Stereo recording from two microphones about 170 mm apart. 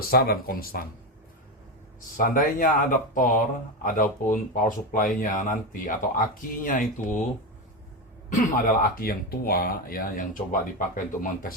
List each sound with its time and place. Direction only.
0.1 s speech: 60° left (ahead or behind)
2.1 s speech: 55° left (ahead or behind)
8.3 s speech: 55° left (ahead or behind)